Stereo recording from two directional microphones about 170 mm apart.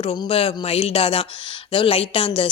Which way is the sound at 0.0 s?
30° left (ahead or behind).